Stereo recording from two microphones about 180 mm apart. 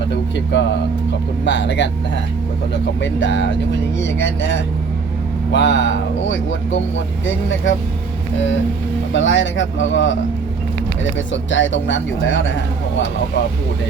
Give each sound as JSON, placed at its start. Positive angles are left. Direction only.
{"t": 0.1, "sound": "speech", "side_deg": 75}
{"t": 3.0, "sound": "speech", "side_deg": 80}
{"t": 9.1, "sound": "speech", "side_deg": 90}
{"t": 11.3, "sound": "speech", "side_deg": 90}